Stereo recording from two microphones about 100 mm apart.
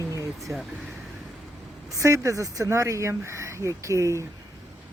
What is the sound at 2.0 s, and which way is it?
Speech, 30° right (ahead or behind).